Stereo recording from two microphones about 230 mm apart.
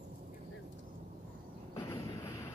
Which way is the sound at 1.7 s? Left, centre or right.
Centre.